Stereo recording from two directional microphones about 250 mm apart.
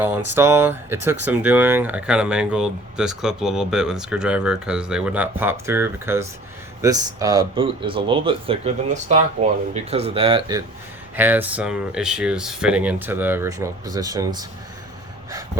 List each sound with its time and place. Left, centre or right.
0.0 s speech: centre
11.2 s speech: centre